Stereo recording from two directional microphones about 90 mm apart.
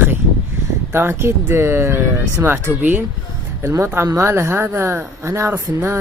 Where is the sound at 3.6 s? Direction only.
35° right (ahead or behind).